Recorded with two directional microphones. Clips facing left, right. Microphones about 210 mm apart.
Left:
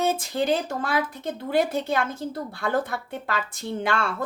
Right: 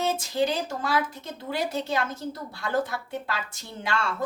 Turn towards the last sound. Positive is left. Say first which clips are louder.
# left 4 dB
turn(degrees=55)  # may be behind; listen again after turning